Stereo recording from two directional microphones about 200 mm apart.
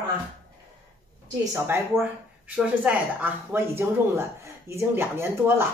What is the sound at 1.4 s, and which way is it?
Speech, 15° right (ahead or behind).